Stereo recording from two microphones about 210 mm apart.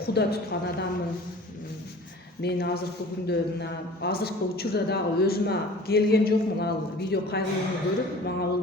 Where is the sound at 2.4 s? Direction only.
50° left (ahead or behind).